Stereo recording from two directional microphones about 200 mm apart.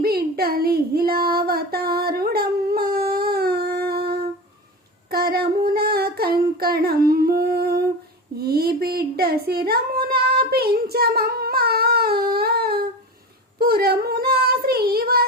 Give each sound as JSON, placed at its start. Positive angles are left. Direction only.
{"t": 0.0, "sound": "child singing", "side_deg": -50}
{"t": 8.4, "sound": "a sound", "side_deg": -50}
{"t": 13.6, "sound": "child singing", "side_deg": -50}